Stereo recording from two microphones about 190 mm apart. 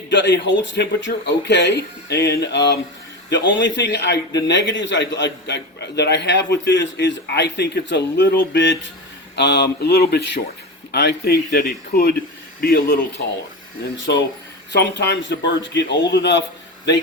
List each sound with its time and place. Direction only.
0.1 s a man's voice: 70° left (ahead or behind)
13.9 s a man's voice: 70° left (ahead or behind)